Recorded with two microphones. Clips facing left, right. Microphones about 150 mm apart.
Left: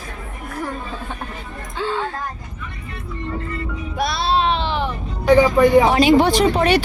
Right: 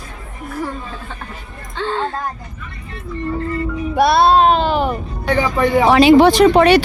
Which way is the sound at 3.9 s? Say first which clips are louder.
Right 8 dB; 60° right (ahead or behind).